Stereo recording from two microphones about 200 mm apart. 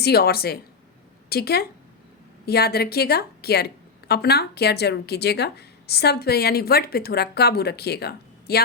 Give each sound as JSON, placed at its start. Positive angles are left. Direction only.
{"t": 0.0, "sound": "speech", "side_deg": 50}